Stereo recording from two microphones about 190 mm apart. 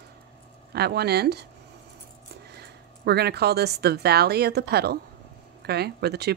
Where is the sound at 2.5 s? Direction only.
60° right (ahead or behind).